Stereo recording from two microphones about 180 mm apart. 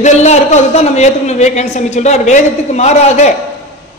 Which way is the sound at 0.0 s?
40° left (ahead or behind).